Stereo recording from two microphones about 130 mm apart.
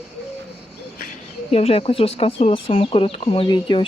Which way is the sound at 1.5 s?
50° left (ahead or behind).